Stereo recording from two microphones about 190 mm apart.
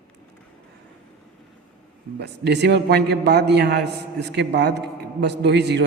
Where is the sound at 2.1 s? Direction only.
60° right (ahead or behind).